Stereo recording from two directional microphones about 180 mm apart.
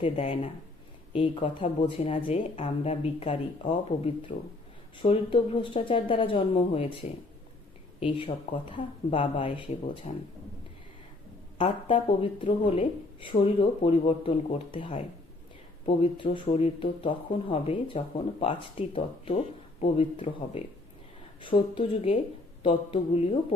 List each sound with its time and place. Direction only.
0.0 s speech: 30° left (ahead or behind)
11.5 s speech: 30° left (ahead or behind)
16.3 s speech: 30° left (ahead or behind)